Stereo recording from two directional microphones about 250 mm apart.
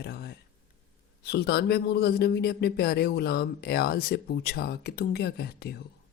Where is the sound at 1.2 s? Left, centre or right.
Left.